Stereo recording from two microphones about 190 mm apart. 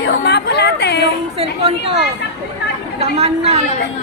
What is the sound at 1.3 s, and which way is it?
Speech, 35° right (ahead or behind).